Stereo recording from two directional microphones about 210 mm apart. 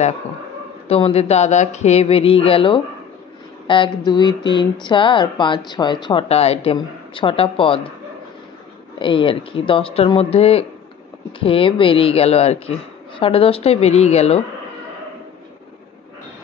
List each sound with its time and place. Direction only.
0.8 s speech: 30° left (ahead or behind)
8.9 s speech: 25° left (ahead or behind)